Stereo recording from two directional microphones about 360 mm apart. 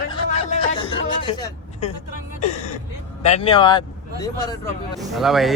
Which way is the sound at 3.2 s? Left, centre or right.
Centre.